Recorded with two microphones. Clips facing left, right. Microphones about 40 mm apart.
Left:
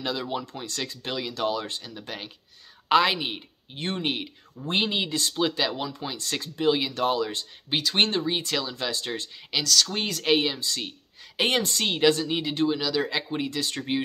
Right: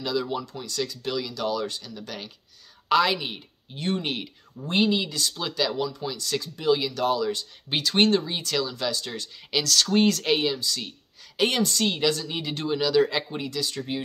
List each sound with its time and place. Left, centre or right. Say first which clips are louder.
0.0 s speech: right 2 dB; left
0.5 s speech: right 3 dB; left; by 4.3 s centre
4.6 s speech: right 3 dB; left
7.9 s speech: right 3 dB; centre
9.5 s speech: right 2 dB; centre
10.6 s speech: even; left
12.4 s speech: left 4 dB; centre
12.6 s speech: right 6 dB; centre
13.4 s speech: left 1 dB; left